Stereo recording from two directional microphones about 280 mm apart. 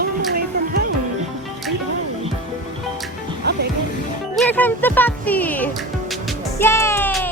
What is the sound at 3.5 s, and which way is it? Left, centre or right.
Music, right.